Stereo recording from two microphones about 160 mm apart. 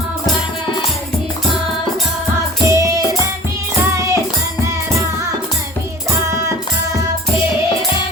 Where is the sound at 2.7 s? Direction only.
20° right (ahead or behind).